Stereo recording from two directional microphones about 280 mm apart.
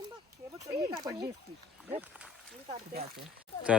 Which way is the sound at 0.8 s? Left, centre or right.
Centre.